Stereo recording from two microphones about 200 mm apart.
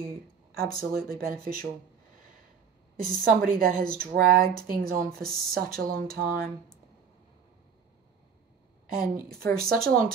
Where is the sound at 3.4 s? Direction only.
45° right (ahead or behind).